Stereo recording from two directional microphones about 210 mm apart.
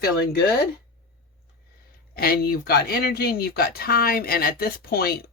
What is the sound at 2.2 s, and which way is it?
Speech, 45° left (ahead or behind).